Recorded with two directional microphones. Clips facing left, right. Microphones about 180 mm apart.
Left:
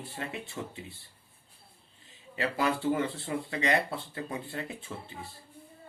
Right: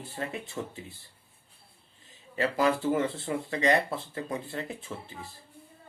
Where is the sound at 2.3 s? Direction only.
40° right (ahead or behind).